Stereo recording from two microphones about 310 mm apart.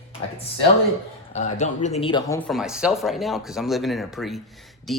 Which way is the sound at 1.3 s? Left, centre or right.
Left.